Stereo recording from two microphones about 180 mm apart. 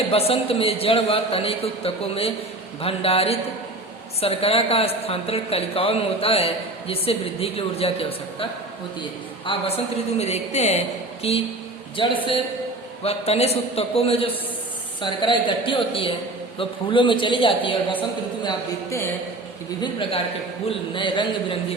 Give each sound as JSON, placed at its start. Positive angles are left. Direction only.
{"t": 0.1, "sound": "a woman's voice", "side_deg": 30}
{"t": 9.5, "sound": "a woman's voice", "side_deg": 35}
{"t": 18.4, "sound": "a man's voice", "side_deg": 15}
{"t": 19.8, "sound": "a woman's voice", "side_deg": 30}